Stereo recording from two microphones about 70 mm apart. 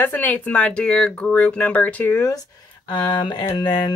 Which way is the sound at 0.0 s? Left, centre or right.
Left.